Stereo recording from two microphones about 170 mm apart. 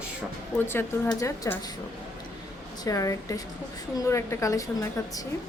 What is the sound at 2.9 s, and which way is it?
Speech, 20° left (ahead or behind).